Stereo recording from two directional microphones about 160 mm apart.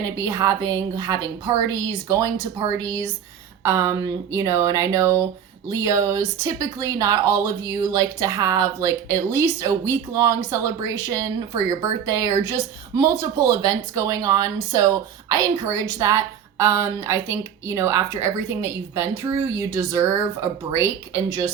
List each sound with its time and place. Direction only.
0.2 s speech: 20° right (ahead or behind)